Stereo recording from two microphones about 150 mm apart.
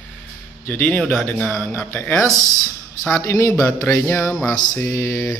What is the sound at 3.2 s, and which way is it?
Mantra, 20° left (ahead or behind).